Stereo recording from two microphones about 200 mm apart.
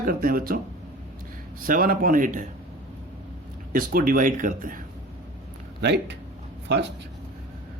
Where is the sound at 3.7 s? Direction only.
45° right (ahead or behind).